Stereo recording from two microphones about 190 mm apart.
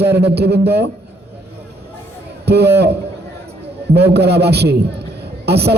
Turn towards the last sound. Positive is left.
turn(degrees=-60)  # may be behind; listen again after turning